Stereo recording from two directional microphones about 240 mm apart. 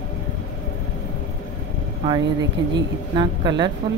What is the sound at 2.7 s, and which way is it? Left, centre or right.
Speech, centre.